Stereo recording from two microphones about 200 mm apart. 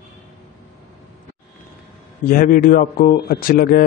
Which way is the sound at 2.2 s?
45° left (ahead or behind).